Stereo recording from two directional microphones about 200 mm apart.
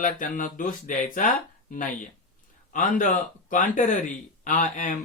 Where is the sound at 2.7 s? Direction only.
40° left (ahead or behind).